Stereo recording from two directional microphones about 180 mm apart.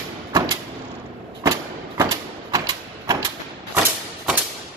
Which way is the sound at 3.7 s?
10° right (ahead or behind).